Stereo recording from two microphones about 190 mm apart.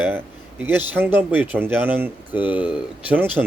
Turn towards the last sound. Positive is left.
turn(degrees=-10)  # may be behind; listen again after turning